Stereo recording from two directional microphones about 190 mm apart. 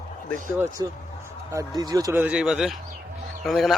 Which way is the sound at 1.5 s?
20° right (ahead or behind).